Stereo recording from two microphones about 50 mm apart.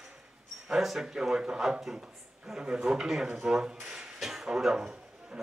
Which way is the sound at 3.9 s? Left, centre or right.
Centre.